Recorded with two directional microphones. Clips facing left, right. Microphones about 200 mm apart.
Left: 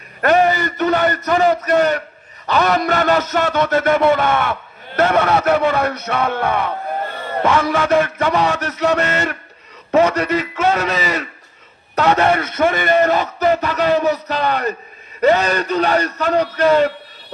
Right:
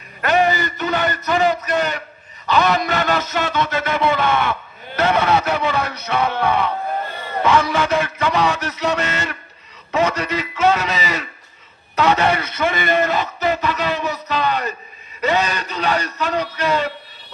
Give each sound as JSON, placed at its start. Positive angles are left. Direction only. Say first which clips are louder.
{"t": 0.2, "sound": "a sound", "louder": "left 3 dB", "side_deg": 50}
{"t": 2.5, "sound": "a man's voice", "louder": "left 1 dB", "side_deg": 45}
{"t": 7.9, "sound": "a man's voice", "louder": "left 3 dB", "side_deg": 45}